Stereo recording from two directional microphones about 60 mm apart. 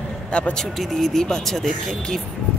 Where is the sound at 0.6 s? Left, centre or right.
Centre.